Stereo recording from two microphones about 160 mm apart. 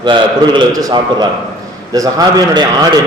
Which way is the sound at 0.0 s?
30° right (ahead or behind).